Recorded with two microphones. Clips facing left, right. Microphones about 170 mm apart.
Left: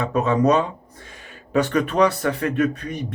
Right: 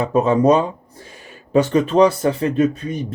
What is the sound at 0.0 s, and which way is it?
Speech, 35° right (ahead or behind).